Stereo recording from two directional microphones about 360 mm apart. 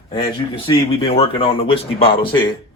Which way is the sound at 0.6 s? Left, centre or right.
Centre.